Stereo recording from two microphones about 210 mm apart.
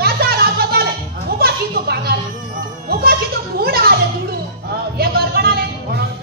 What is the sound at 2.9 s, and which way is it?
Children playing, 45° right (ahead or behind).